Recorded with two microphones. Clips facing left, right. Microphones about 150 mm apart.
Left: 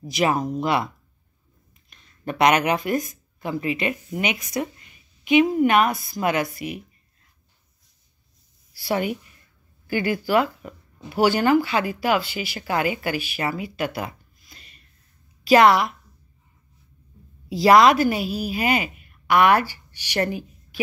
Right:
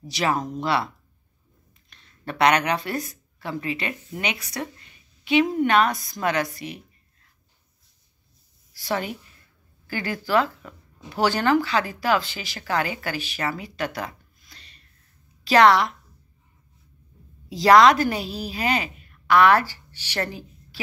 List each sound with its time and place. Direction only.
0.1 s a woman's voice: 15° left (ahead or behind)
1.9 s a woman's voice: 15° left (ahead or behind)
8.8 s a woman's voice: 10° left (ahead or behind)
17.5 s a woman's voice: 10° left (ahead or behind)